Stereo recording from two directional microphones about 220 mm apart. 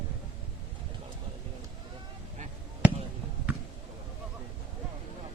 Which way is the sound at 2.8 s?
5° right (ahead or behind).